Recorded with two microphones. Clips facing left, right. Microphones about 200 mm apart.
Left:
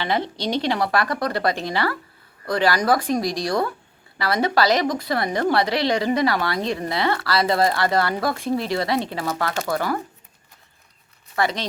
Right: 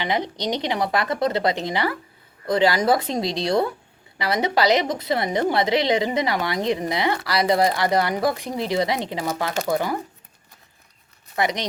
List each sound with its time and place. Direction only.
0.0 s a woman's voice: 15° right (ahead or behind)
11.3 s speech: 20° right (ahead or behind)